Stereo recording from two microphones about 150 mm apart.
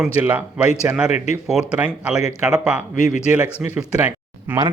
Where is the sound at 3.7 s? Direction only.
10° right (ahead or behind).